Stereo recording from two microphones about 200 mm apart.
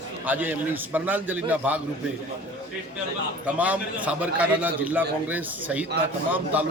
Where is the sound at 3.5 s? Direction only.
5° right (ahead or behind).